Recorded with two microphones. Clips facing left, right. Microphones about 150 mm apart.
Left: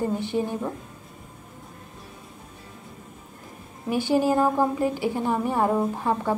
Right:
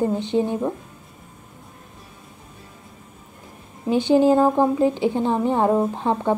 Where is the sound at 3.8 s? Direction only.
20° right (ahead or behind).